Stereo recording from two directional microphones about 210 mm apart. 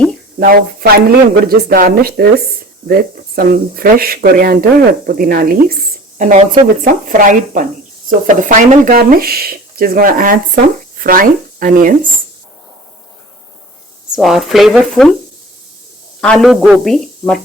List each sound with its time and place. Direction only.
0.3 s speech: 45° right (ahead or behind)
14.2 s speech: centre (ahead or behind)
16.2 s speech: centre (ahead or behind)